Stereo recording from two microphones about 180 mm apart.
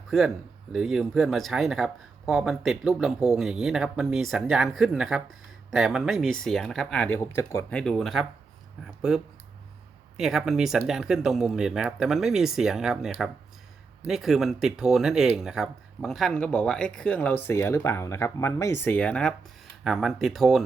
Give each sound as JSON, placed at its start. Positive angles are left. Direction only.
{"t": 0.7, "sound": "speech", "side_deg": 0}
{"t": 14.1, "sound": "speech", "side_deg": 0}